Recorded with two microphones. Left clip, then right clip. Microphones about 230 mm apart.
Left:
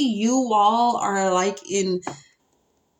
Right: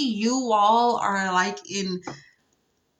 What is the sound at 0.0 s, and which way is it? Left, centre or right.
Speech, right.